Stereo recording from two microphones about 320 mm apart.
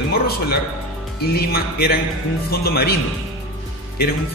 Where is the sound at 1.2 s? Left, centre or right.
Left.